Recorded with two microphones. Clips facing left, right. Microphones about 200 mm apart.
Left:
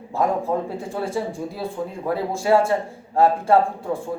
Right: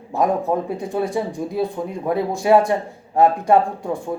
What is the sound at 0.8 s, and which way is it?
Speech, 15° right (ahead or behind).